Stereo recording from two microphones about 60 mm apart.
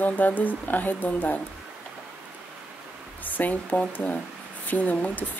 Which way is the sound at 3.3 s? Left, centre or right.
Left.